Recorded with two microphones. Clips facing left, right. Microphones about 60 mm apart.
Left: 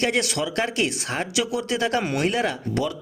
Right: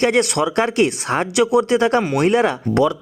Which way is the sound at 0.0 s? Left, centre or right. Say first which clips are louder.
Right 7 dB; right.